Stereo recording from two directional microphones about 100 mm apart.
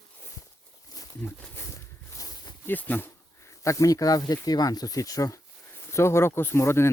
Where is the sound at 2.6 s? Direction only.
20° left (ahead or behind).